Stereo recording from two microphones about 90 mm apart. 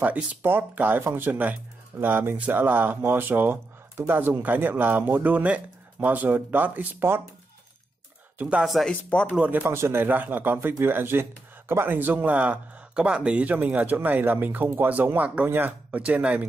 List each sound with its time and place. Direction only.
0.0 s speech: 20° right (ahead or behind)
8.4 s speech: 15° right (ahead or behind)
8.8 s speech: 15° left (ahead or behind)
9.3 s speech: 15° right (ahead or behind)